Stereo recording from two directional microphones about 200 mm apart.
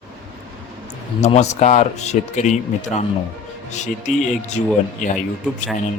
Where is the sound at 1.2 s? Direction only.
35° left (ahead or behind).